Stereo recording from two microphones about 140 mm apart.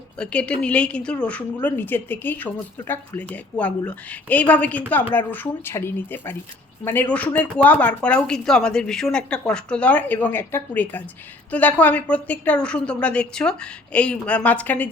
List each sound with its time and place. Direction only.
0.2 s speech: 10° left (ahead or behind)